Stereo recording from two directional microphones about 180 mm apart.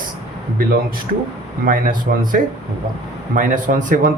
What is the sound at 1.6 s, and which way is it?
A man's voice, 50° right (ahead or behind).